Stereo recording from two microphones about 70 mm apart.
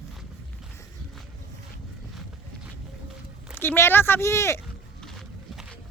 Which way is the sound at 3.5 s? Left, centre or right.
Left.